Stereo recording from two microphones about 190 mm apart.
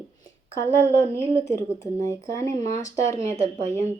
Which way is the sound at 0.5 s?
15° left (ahead or behind).